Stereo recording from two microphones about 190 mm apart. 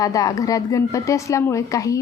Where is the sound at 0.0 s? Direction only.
20° left (ahead or behind).